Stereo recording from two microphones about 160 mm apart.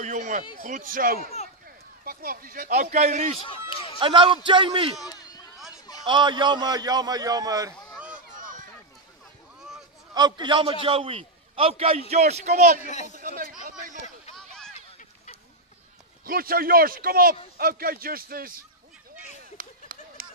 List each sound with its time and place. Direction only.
0.0 s speech: 50° right (ahead or behind)
3.3 s speech: 35° left (ahead or behind)
4.0 s a man's voice: 30° right (ahead or behind)
5.0 s a sound: 25° left (ahead or behind)
6.0 s a man's voice: 30° right (ahead or behind)
10.1 s a man's voice: 25° right (ahead or behind); by 12.8 s 50° right (ahead or behind)
12.8 s a man's voice: 50° left (ahead or behind)
13.1 s speech: 60° right (ahead or behind)
14.3 s a sound: 5° left (ahead or behind)
16.3 s a man's voice: 65° right (ahead or behind)
19.5 s a sound: 60° right (ahead or behind)